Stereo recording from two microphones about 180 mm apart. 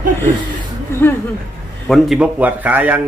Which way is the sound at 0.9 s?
15° left (ahead or behind).